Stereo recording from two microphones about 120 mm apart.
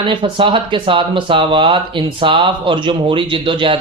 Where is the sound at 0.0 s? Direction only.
40° right (ahead or behind).